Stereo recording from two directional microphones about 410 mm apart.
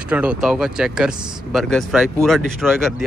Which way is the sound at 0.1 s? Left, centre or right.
Centre.